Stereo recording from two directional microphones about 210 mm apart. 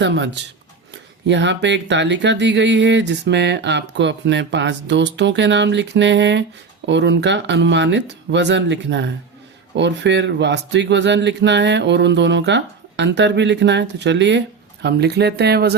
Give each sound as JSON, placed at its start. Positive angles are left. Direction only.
{"t": 0.0, "sound": "speech", "side_deg": -55}
{"t": 1.3, "sound": "speech", "side_deg": -55}